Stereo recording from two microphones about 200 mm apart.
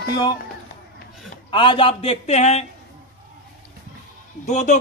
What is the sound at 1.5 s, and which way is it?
A man's voice, 25° left (ahead or behind).